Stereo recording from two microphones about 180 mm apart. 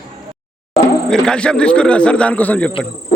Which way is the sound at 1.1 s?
5° left (ahead or behind).